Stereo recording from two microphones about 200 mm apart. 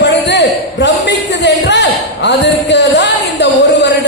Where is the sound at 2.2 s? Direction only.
60° left (ahead or behind).